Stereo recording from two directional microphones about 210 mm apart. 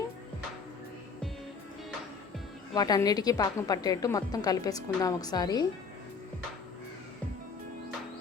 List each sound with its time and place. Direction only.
2.7 s a woman's voice: 20° left (ahead or behind)